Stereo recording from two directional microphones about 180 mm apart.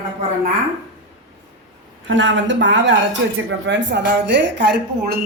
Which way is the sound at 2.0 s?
90° right.